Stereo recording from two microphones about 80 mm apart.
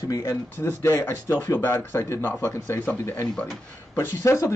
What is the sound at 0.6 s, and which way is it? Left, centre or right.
A man's voice, left.